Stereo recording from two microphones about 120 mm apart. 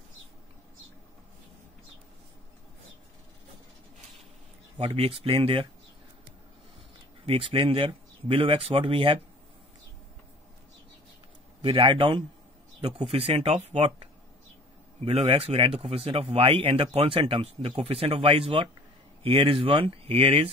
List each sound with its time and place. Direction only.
4.7 s speech: 55° right (ahead or behind)
7.2 s speech: 50° right (ahead or behind)
11.6 s speech: 45° right (ahead or behind)
15.0 s speech: 55° right (ahead or behind)